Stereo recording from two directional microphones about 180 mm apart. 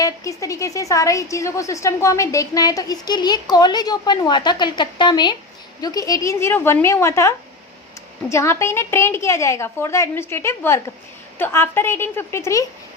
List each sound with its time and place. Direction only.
0.0 s a woman's voice: 15° left (ahead or behind)